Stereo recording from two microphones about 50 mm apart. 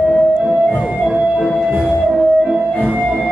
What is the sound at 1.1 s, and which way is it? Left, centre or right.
Music, centre.